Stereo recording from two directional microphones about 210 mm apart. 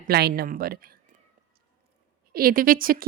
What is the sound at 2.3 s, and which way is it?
Speech, 45° right (ahead or behind).